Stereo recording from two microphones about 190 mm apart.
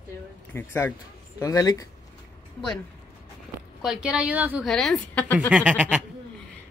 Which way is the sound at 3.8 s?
5° right (ahead or behind).